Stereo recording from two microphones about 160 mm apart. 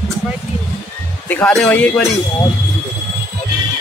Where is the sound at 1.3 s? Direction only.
10° left (ahead or behind).